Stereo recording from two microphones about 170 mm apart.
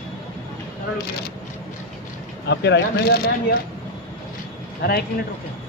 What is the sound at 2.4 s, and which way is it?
Speech, 90° left.